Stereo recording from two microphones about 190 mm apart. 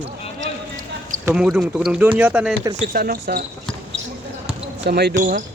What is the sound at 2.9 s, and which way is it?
Speech, 50° right (ahead or behind).